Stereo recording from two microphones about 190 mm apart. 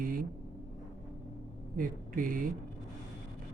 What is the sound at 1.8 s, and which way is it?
Speech, 45° right (ahead or behind).